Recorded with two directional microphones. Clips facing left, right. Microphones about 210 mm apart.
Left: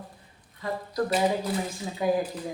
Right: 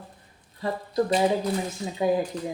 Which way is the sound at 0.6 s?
35° right (ahead or behind).